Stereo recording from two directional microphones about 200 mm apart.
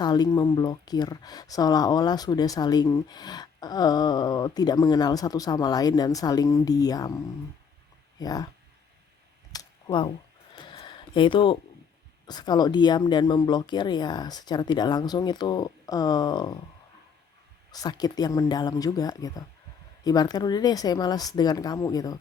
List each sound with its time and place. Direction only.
0.0 s speech: 20° left (ahead or behind)
8.2 s speech: 20° left (ahead or behind)
9.5 s a sound: 20° left (ahead or behind)
12.2 s speech: 20° left (ahead or behind)
17.7 s speech: 20° left (ahead or behind)